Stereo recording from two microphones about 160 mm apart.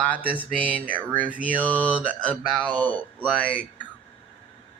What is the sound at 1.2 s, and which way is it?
Speech, 10° right (ahead or behind).